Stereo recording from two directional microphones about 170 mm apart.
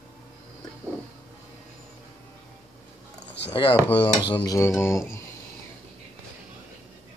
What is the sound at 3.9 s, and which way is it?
Rub, 30° left (ahead or behind).